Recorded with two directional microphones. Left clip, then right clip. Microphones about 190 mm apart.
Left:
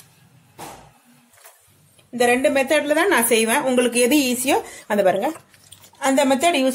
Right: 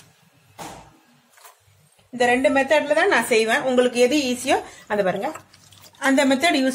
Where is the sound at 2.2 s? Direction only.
30° left (ahead or behind).